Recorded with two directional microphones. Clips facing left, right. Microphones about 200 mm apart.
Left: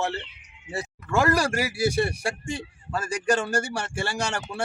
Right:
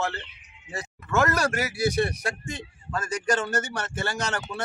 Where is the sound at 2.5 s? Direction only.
30° left (ahead or behind).